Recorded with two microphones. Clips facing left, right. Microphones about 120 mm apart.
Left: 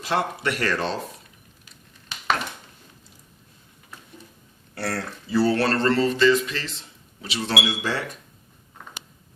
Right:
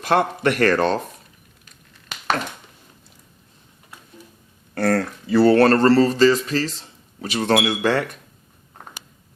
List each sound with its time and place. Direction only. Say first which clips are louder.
0.0 s speech: right 6 dB; 55° right (ahead or behind)
1.6 s a sound: right 4 dB; 50° right (ahead or behind)
4.7 s speech: right 9 dB; 45° right (ahead or behind)